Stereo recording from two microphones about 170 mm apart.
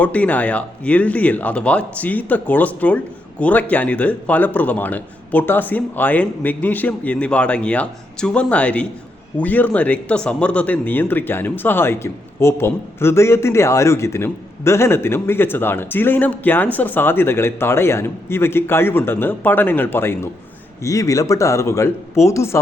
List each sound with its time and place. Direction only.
0.0 s speech: 10° left (ahead or behind)